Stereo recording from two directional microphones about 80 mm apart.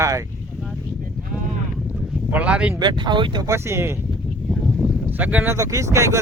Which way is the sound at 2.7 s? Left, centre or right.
Right.